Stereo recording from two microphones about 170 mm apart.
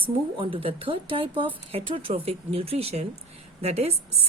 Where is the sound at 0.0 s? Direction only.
30° right (ahead or behind).